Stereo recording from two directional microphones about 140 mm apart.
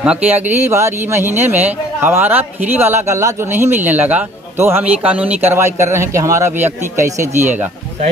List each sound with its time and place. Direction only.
0.0 s speech: 10° right (ahead or behind)